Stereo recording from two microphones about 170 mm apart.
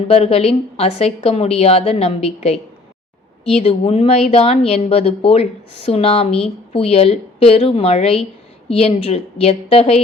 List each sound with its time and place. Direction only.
0.1 s speech: 35° left (ahead or behind)